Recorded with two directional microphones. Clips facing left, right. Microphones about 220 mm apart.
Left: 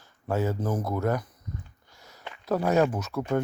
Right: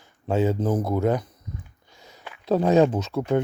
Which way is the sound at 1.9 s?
20° right (ahead or behind).